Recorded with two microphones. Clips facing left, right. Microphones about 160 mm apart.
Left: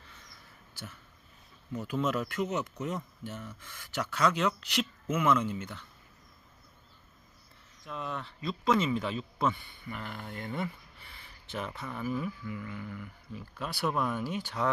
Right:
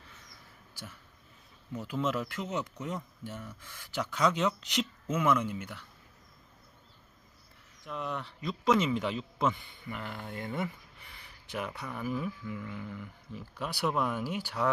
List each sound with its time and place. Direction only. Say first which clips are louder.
1.9 s speech: left 1 dB; 5° right (ahead or behind)
2.4 s speech: left 3 dB; 5° left (ahead or behind)
3.4 s speech: left 1 dB; 10° right (ahead or behind)
7.9 s speech: right 1 dB; 15° right (ahead or behind)